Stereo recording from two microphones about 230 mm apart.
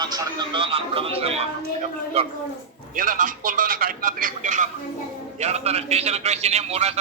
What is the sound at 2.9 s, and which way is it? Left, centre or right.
A woman's voice, right.